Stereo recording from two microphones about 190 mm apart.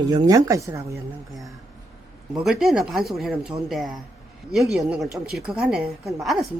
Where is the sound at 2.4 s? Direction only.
Centre (ahead or behind).